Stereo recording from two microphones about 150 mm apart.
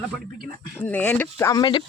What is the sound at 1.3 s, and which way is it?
Speech, 25° left (ahead or behind).